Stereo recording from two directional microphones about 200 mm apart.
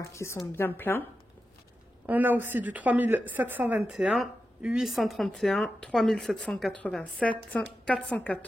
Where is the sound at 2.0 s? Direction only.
10° right (ahead or behind).